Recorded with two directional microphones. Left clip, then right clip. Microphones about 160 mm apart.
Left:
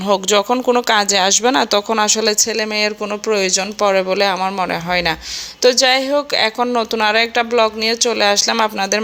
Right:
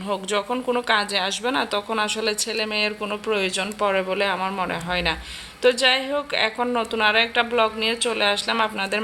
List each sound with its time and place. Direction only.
0.0 s speech: 50° left (ahead or behind)
3.0 s speech: 30° left (ahead or behind)